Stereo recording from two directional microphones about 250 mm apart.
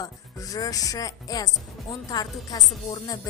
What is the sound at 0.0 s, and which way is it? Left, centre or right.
Music, centre.